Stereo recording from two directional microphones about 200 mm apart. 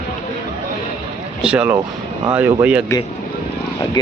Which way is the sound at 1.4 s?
5° right (ahead or behind).